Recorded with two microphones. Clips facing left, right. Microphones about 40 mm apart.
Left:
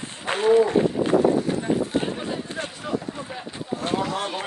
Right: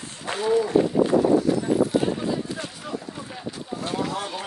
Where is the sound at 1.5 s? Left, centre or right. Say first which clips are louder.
Right 2 dB; left.